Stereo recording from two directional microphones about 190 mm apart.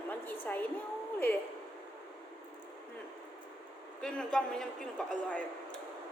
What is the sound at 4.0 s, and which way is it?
A man's voice, 5° left (ahead or behind).